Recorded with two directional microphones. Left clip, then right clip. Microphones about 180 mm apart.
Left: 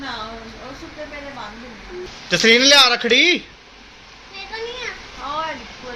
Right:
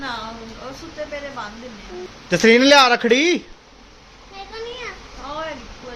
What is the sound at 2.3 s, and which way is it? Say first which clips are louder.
A man's voice: even; 40° right (ahead or behind).